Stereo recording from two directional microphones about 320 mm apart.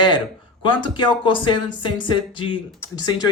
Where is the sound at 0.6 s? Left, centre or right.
Centre.